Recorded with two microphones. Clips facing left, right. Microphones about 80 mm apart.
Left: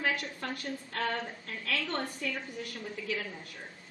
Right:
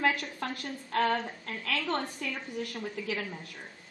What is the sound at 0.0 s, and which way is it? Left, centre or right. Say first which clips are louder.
A woman's voice: right 4 dB; right.